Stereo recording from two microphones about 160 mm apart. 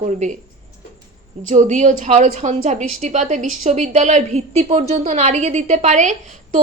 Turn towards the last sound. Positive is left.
turn(degrees=-50)  # may be behind; listen again after turning